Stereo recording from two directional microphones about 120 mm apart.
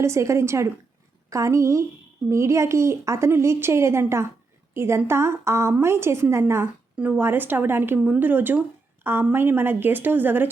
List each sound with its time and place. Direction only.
0.0 s a woman's voice: 25° right (ahead or behind)